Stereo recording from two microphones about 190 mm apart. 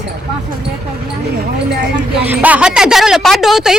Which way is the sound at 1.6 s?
60° right (ahead or behind).